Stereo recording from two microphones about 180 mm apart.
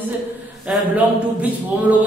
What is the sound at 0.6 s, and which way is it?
Speech, 5° right (ahead or behind).